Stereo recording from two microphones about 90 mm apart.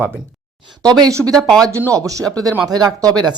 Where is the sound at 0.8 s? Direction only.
45° right (ahead or behind).